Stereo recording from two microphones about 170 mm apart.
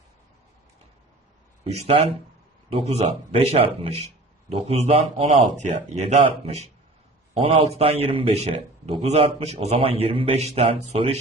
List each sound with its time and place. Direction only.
1.6 s a man's voice: 35° right (ahead or behind)